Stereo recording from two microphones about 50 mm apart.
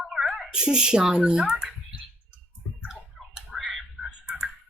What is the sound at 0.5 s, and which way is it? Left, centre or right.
Speech, centre.